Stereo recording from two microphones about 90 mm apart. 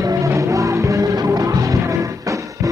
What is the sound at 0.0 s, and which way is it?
Music, 40° right (ahead or behind).